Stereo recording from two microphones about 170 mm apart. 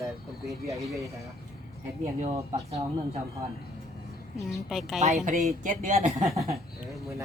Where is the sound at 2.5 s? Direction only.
45° right (ahead or behind).